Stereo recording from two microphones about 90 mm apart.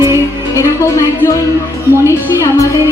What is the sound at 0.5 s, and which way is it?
Speech, 35° left (ahead or behind).